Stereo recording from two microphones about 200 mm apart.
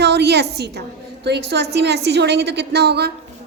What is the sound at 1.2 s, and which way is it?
A woman's voice, 55° right (ahead or behind).